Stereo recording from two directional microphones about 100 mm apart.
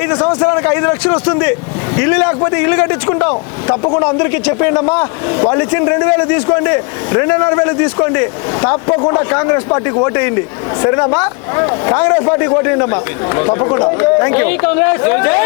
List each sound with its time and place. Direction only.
0.0 s a man's voice: 20° left (ahead or behind)